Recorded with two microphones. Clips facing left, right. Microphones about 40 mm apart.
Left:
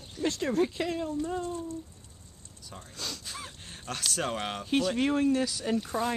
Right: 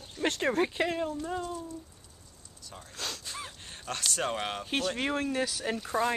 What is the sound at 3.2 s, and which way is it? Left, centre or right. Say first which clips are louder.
Speech: right 1 dB; centre.